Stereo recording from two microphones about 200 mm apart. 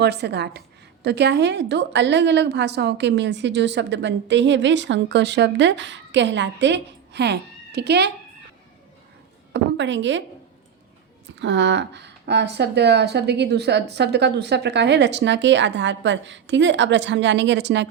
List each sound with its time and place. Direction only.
0.0 s a woman's voice: 55° right (ahead or behind)
9.5 s a woman's voice: 65° right (ahead or behind)
11.3 s a woman's voice: 60° right (ahead or behind)